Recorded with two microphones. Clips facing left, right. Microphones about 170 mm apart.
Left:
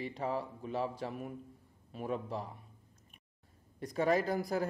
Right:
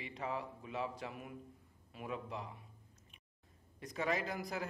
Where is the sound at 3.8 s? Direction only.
35° left (ahead or behind).